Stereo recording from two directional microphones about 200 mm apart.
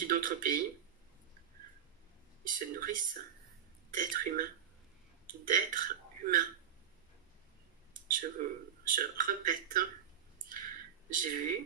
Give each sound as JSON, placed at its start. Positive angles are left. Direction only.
{"t": 0.0, "sound": "speech", "side_deg": -45}
{"t": 2.4, "sound": "speech", "side_deg": -45}
{"t": 5.5, "sound": "speech", "side_deg": -45}
{"t": 8.1, "sound": "a man's voice", "side_deg": -45}
{"t": 10.5, "sound": "a sound", "side_deg": -45}